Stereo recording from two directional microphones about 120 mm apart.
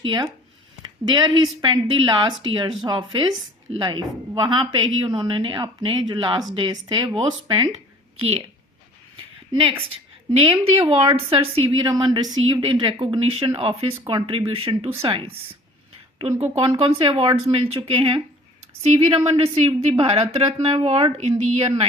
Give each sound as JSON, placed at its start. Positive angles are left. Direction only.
{"t": 0.0, "sound": "a woman's voice", "side_deg": -40}
{"t": 8.2, "sound": "speech", "side_deg": -50}
{"t": 9.1, "sound": "a sound", "side_deg": -45}
{"t": 10.4, "sound": "speech", "side_deg": -55}
{"t": 11.8, "sound": "a woman's voice", "side_deg": -40}